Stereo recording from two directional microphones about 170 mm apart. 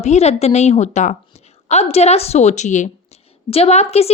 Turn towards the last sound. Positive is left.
turn(degrees=40)  # may be behind; listen again after turning